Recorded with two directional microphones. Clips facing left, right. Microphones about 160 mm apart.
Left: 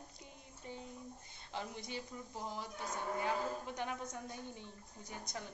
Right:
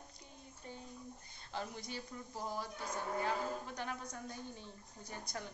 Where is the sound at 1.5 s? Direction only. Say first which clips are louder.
Even; 20° left (ahead or behind).